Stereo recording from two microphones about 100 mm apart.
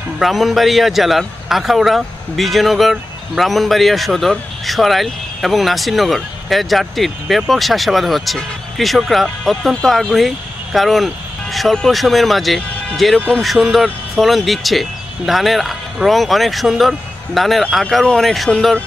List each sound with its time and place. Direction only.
0.2 s a man's voice: centre (ahead or behind)